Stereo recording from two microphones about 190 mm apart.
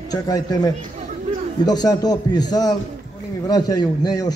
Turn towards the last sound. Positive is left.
turn(degrees=20)  # may be behind; listen again after turning